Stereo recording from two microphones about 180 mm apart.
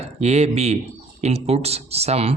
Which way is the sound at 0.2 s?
35° right (ahead or behind).